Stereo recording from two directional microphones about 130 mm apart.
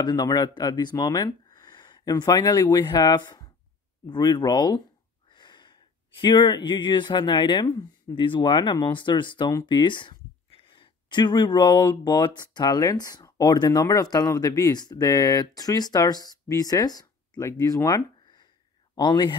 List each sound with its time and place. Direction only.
0.0 s speech: 30° left (ahead or behind)